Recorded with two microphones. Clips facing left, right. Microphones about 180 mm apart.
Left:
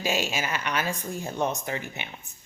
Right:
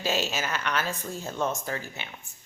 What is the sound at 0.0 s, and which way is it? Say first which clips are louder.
A woman's voice: left 1 dB; 10° left (ahead or behind).